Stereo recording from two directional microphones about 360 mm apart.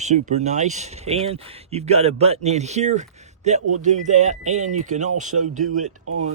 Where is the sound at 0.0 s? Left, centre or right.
Centre.